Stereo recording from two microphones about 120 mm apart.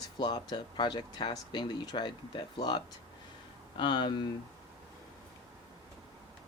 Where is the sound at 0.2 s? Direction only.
35° left (ahead or behind).